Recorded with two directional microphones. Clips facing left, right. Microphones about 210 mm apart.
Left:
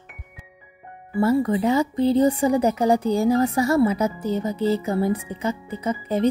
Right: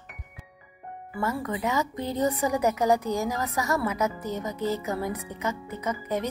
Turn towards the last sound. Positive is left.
turn(degrees=30)  # may be behind; listen again after turning